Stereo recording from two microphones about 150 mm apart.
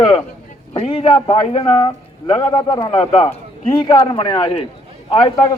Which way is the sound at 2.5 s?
35° left (ahead or behind).